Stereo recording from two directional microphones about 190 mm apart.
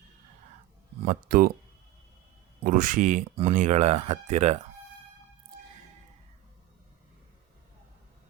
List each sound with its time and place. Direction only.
1.0 s speech: 45° right (ahead or behind)
2.6 s speech: 45° right (ahead or behind)